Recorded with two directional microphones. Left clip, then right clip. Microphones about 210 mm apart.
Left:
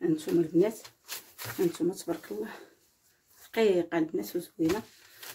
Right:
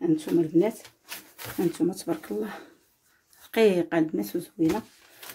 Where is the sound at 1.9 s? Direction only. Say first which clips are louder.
Right 4 dB; 35° right (ahead or behind).